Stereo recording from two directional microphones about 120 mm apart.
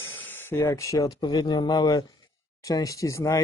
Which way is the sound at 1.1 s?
40° left (ahead or behind).